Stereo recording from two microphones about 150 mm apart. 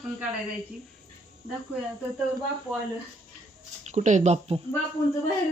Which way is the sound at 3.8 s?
50° right (ahead or behind).